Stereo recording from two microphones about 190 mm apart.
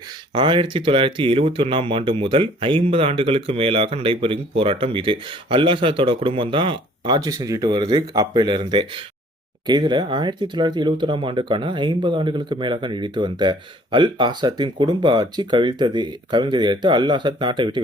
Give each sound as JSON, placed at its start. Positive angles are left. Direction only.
{"t": 0.3, "sound": "speech", "side_deg": -25}